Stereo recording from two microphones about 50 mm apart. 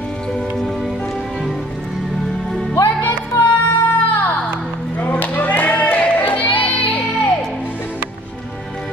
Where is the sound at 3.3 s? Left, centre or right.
Left.